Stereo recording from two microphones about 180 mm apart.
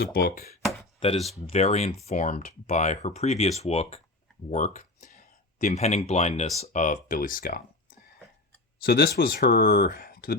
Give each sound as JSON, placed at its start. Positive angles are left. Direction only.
{"t": 0.0, "sound": "speech", "side_deg": 60}
{"t": 0.6, "sound": "a sound", "side_deg": 0}
{"t": 0.9, "sound": "speech", "side_deg": 30}
{"t": 8.8, "sound": "speech", "side_deg": 60}